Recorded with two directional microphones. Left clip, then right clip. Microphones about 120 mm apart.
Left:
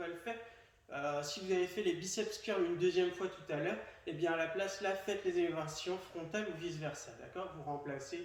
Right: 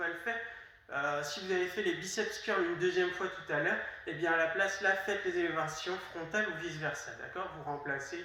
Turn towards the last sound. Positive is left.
turn(degrees=25)  # may be behind; listen again after turning